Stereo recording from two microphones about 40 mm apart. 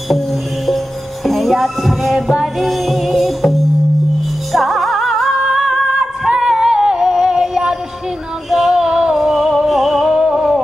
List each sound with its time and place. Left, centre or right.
1.2 s music: centre
4.5 s music: centre
5.4 s music: centre
9.1 s music: centre